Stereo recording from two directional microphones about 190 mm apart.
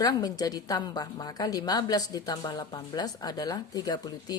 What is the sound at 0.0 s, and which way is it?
A woman's voice, 20° left (ahead or behind).